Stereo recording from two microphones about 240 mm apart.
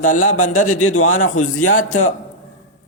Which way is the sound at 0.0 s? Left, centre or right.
Left.